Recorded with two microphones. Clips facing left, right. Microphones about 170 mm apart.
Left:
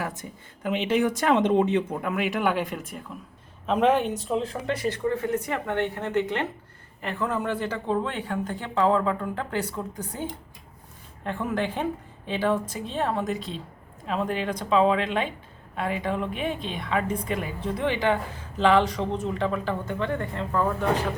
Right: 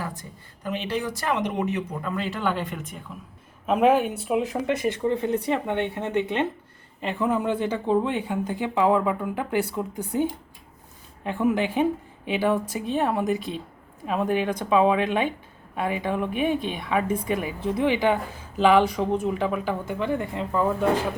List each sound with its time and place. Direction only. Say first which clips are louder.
0.6 s speech: left 5 dB; 20° left (ahead or behind)
2.1 s speech: left 2 dB; 15° left (ahead or behind)
3.7 s speech: right 2 dB; 5° right (ahead or behind)